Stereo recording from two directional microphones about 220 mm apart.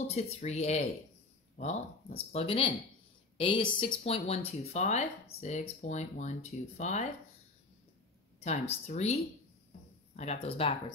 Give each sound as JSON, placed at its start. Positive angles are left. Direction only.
{"t": 0.1, "sound": "speech", "side_deg": 30}
{"t": 8.5, "sound": "speech", "side_deg": 30}